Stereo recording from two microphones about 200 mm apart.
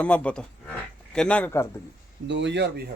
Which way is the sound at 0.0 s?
5° left (ahead or behind).